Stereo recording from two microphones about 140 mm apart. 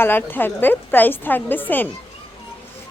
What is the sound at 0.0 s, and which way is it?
A woman's voice, 15° left (ahead or behind).